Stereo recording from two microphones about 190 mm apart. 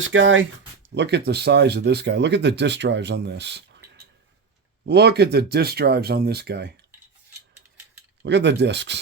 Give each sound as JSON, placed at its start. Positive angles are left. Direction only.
{"t": 0.0, "sound": "speech", "side_deg": -90}
{"t": 8.2, "sound": "speech", "side_deg": -65}